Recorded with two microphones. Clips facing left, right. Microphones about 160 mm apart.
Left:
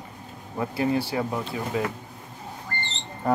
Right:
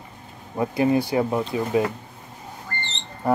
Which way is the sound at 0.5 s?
20° right (ahead or behind).